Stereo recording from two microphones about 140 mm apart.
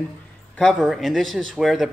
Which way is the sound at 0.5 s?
Centre (ahead or behind).